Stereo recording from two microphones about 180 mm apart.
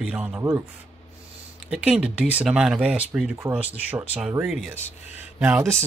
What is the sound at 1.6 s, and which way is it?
Speech, 5° right (ahead or behind).